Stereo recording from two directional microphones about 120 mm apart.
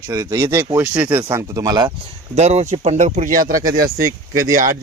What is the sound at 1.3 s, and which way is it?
Speech, 30° right (ahead or behind).